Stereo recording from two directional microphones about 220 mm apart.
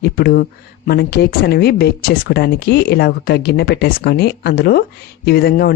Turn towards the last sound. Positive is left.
turn(degrees=45)  # may be behind; listen again after turning